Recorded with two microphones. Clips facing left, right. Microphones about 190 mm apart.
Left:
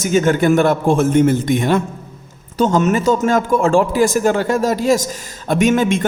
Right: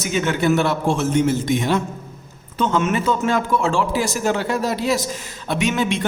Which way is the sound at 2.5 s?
40° left (ahead or behind).